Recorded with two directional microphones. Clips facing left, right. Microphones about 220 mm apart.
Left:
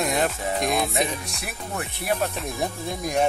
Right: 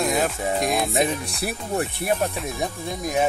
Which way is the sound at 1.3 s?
35° right (ahead or behind).